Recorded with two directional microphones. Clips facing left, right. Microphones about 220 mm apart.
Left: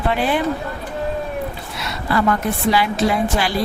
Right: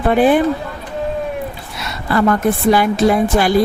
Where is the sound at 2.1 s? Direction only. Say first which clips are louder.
Right 4 dB; 50° right (ahead or behind).